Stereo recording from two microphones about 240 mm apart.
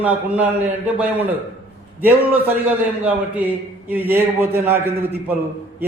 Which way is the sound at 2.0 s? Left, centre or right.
Centre.